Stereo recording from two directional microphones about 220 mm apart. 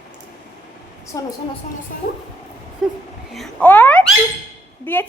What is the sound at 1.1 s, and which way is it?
Speech, 15° left (ahead or behind).